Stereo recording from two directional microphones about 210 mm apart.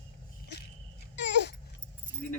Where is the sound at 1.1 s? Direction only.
55° left (ahead or behind).